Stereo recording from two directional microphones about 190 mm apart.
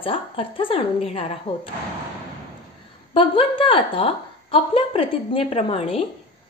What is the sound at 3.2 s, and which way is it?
A woman's voice, 30° left (ahead or behind).